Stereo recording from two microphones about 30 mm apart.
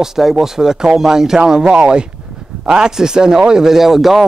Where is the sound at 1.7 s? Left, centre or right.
Right.